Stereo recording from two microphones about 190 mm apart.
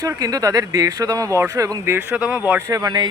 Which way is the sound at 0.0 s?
20° right (ahead or behind).